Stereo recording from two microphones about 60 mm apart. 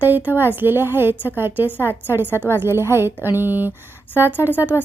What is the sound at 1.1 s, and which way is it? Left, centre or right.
Speech, left.